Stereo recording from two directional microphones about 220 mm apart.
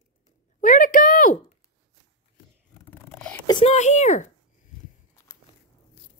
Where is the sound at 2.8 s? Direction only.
10° left (ahead or behind).